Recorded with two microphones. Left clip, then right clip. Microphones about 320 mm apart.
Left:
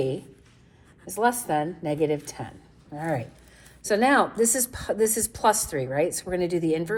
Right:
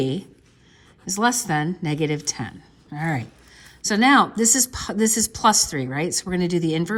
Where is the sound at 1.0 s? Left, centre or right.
Right.